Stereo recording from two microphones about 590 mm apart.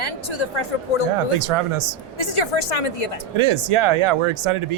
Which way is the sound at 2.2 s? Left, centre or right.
Left.